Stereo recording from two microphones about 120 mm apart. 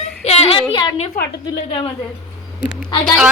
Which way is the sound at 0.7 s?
40° left (ahead or behind).